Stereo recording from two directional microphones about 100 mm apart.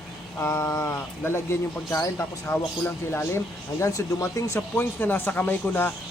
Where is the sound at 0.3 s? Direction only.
25° left (ahead or behind).